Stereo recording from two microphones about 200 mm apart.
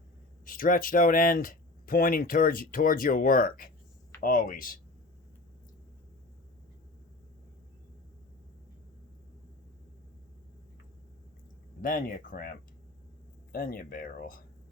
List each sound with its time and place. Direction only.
0.4 s speech: 45° left (ahead or behind)
11.8 s speech: 45° left (ahead or behind)